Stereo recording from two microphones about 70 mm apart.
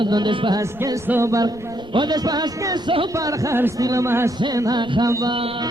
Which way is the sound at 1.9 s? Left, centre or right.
Right.